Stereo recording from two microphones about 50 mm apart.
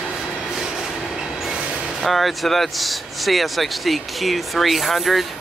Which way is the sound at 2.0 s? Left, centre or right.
Centre.